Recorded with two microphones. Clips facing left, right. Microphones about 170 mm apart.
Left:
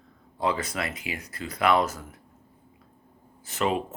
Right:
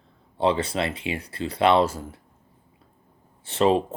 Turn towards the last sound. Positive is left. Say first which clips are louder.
# right 7 dB
turn(degrees=-30)  # may be behind; listen again after turning